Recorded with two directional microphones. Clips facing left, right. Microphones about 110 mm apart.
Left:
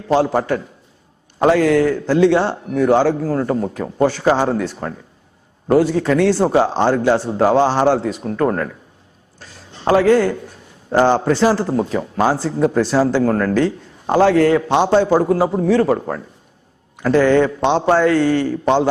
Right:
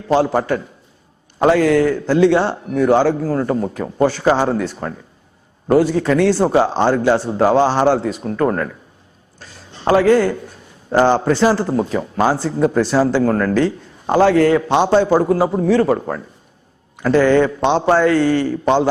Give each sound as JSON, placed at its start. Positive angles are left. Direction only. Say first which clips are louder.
{"t": 0.1, "sound": "a man's voice", "louder": "even", "side_deg": -15}
{"t": 9.9, "sound": "a man's voice", "louder": "even", "side_deg": -15}